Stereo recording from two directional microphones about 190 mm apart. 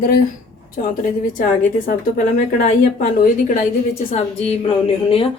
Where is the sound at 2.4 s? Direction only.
45° left (ahead or behind).